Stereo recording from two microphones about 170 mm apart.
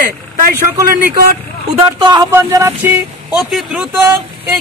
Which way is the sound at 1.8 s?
25° right (ahead or behind).